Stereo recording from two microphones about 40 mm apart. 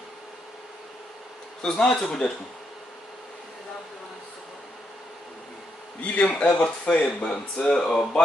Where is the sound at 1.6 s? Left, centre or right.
Centre.